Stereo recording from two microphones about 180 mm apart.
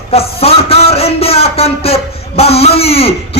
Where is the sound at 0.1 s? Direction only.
35° left (ahead or behind).